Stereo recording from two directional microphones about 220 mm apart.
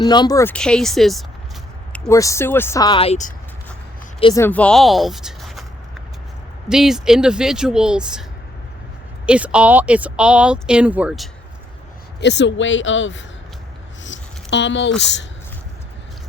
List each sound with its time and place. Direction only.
0.0 s speech: 20° left (ahead or behind); by 1.2 s centre (ahead or behind)
1.9 s speech: 15° left (ahead or behind); by 3.3 s 30° left (ahead or behind)
4.2 s speech: 20° left (ahead or behind)
4.4 s speech: 5° left (ahead or behind)
6.7 s speech: centre (ahead or behind)
9.2 s speech: 5° right (ahead or behind)
12.2 s speech: 50° left (ahead or behind)
14.0 s a sound: 55° left (ahead or behind)